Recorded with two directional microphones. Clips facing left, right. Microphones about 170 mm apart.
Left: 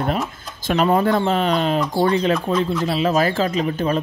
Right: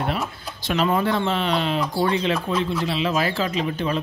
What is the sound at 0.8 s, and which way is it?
Speech, 40° left (ahead or behind).